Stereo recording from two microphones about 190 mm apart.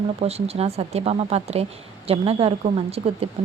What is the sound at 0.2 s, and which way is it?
A woman's voice, 35° right (ahead or behind).